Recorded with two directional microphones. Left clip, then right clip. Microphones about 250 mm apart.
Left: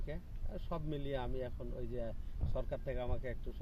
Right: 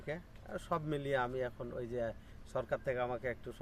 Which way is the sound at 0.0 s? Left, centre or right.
Centre.